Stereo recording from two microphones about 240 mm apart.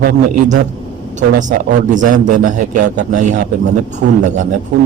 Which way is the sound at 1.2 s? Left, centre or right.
Right.